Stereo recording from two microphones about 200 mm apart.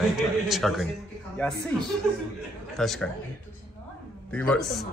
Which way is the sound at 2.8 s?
Centre (ahead or behind).